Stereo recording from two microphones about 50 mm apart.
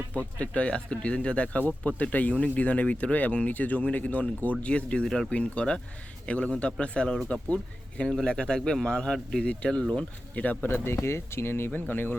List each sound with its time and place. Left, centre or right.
0.3 s speech: left
9.3 s speech: left
10.3 s speech: left
10.7 s speech: left
11.7 s speech: left